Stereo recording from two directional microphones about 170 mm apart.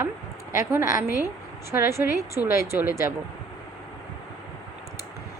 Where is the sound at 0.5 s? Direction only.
15° right (ahead or behind).